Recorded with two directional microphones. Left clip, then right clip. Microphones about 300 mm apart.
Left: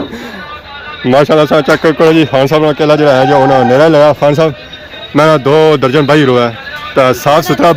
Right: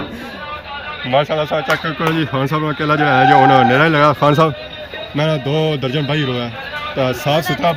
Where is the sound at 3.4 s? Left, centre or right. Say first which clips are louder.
Left 2 dB; centre.